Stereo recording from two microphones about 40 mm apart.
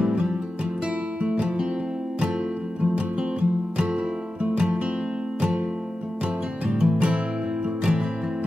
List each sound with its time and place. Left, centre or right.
0.0 s music: centre
2.8 s music: right
6.8 s music: right